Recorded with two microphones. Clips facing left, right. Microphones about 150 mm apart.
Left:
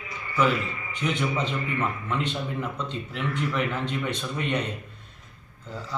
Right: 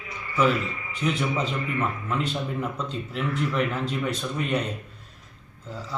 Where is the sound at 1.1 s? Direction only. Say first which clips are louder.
Left 2 dB; 35° right (ahead or behind).